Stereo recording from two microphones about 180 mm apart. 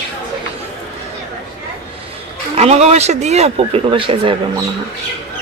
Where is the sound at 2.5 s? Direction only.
35° right (ahead or behind).